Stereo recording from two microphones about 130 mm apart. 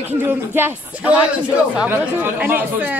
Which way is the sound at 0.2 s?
15° right (ahead or behind).